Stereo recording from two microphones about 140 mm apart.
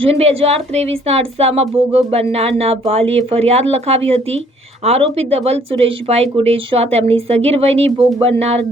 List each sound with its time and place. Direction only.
0.0 s speech: 50° right (ahead or behind)